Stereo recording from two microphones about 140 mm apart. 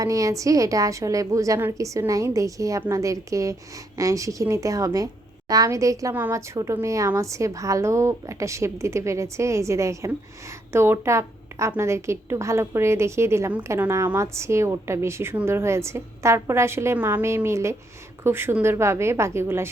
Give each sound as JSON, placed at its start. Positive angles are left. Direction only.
{"t": 0.0, "sound": "a woman's voice", "side_deg": -25}